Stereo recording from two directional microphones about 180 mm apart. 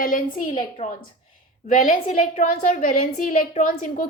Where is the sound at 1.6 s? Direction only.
50° left (ahead or behind).